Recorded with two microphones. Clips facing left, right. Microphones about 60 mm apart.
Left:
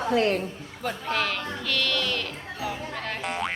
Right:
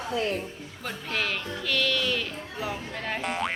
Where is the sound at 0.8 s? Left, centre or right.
Centre.